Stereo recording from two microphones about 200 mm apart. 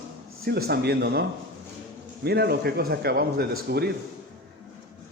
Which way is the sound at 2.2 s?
55° right (ahead or behind).